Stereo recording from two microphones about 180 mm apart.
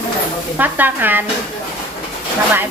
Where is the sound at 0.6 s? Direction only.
10° right (ahead or behind).